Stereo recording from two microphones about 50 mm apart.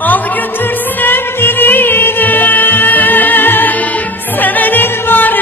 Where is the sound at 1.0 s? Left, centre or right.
Left.